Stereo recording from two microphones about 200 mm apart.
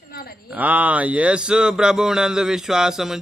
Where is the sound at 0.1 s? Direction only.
50° left (ahead or behind).